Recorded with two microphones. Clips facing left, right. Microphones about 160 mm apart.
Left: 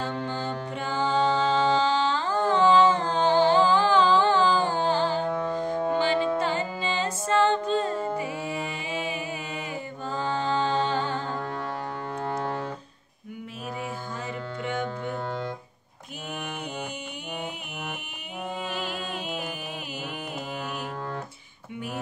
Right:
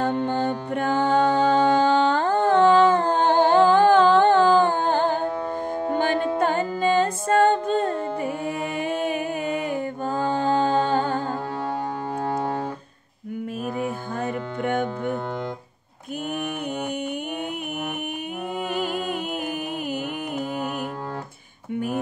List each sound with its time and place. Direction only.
0.2 s music: 55° right (ahead or behind)
13.7 s hum: 55° right (ahead or behind)